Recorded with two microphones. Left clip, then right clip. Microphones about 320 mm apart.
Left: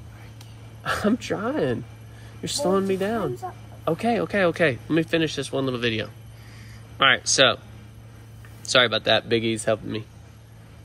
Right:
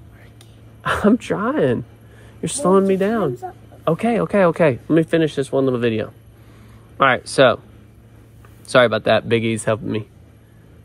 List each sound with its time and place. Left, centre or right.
0.8 s speech: centre
7.2 s speech: centre
8.6 s speech: centre